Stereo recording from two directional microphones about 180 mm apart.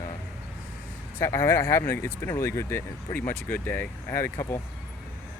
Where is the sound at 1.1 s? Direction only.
15° left (ahead or behind).